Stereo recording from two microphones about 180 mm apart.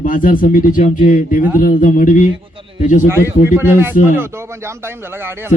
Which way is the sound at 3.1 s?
15° right (ahead or behind).